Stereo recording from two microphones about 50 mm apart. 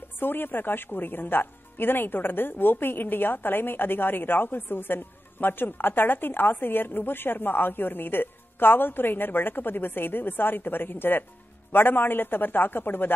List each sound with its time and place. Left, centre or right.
0.2 s speech: left